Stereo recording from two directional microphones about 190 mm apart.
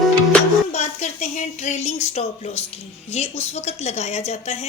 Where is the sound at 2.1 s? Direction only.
35° left (ahead or behind).